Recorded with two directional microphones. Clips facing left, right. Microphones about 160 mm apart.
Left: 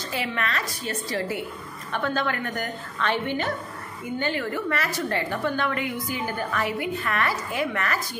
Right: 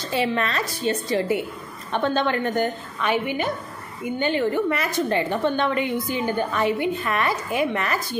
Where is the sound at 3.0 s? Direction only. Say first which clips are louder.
Right 2 dB; 10° right (ahead or behind).